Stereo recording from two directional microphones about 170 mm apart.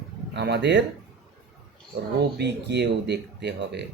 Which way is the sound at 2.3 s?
80° right.